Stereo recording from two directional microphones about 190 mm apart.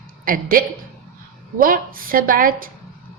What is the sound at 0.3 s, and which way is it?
A woman's voice, 50° right (ahead or behind).